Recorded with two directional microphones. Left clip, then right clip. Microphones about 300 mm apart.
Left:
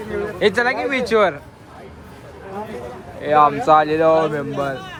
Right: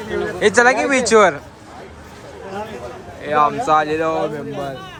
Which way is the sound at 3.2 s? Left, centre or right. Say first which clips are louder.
Left 2 dB; centre.